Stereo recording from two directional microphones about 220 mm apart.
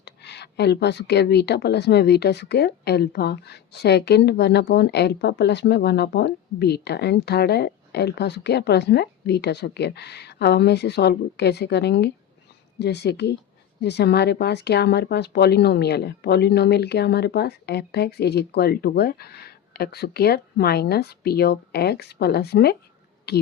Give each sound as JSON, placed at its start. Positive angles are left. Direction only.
{"t": 0.0, "sound": "speech", "side_deg": 50}